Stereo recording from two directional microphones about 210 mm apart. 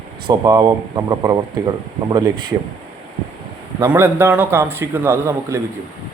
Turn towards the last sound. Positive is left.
turn(degrees=-10)  # may be behind; listen again after turning